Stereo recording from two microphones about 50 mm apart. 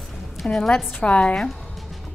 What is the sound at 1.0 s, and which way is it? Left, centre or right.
Speech, left.